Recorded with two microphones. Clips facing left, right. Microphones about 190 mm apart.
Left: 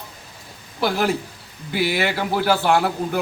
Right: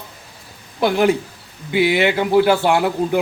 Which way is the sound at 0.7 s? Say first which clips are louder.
Right 5 dB; 20° right (ahead or behind).